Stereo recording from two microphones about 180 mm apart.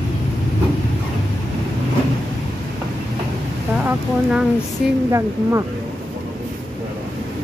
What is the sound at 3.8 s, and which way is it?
Speech, 5° right (ahead or behind).